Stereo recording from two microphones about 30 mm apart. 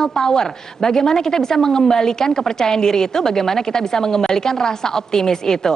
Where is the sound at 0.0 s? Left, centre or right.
Centre.